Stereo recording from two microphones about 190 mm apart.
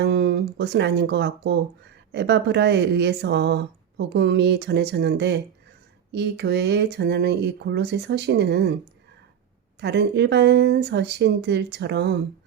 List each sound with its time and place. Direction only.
0.0 s speech: 60° right (ahead or behind)
9.8 s speech: 65° right (ahead or behind)